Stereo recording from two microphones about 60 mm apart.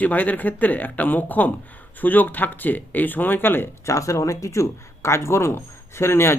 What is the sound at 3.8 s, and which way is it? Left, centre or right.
Speech, left.